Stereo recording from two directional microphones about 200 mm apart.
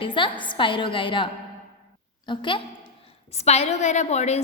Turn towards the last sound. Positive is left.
turn(degrees=35)  # may be behind; listen again after turning